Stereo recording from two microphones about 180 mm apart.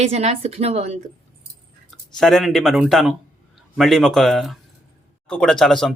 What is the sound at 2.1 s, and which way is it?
Speech, centre (ahead or behind).